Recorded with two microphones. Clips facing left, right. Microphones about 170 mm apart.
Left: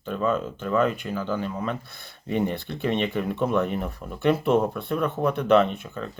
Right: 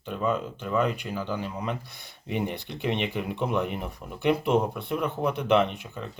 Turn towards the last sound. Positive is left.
turn(degrees=-15)  # may be behind; listen again after turning